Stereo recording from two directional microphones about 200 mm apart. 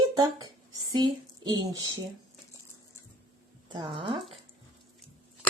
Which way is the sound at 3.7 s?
25° right (ahead or behind).